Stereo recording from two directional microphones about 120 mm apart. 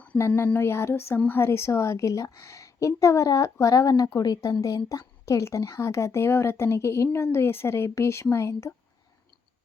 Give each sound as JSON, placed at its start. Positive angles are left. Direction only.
{"t": 0.0, "sound": "a woman's voice", "side_deg": 10}